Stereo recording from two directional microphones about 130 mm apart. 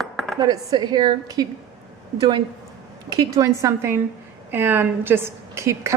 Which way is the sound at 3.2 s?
25° right (ahead or behind).